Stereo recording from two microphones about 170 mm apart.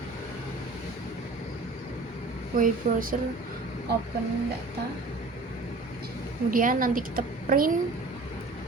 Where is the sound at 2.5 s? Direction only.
55° right (ahead or behind).